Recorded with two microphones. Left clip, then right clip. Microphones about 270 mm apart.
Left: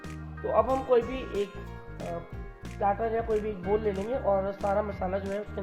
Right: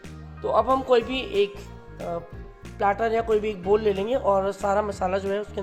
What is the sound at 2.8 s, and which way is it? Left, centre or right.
Speech, right.